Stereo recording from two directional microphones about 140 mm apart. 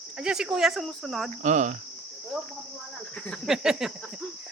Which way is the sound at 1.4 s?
60° right (ahead or behind).